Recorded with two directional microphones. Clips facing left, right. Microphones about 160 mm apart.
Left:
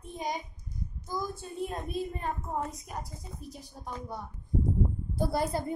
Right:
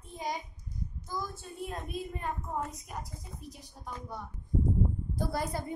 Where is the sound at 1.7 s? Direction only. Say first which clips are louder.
Left 4 dB; 30° left (ahead or behind).